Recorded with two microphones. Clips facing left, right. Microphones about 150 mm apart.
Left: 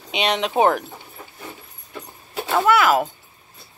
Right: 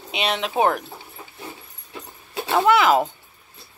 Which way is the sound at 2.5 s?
20° right (ahead or behind).